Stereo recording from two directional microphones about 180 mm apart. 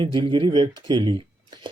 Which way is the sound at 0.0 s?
25° right (ahead or behind).